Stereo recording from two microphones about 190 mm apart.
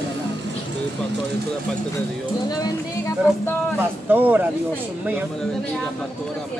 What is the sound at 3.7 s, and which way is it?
Speech, 10° right (ahead or behind).